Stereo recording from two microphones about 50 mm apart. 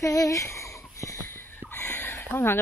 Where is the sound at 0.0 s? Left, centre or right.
Left.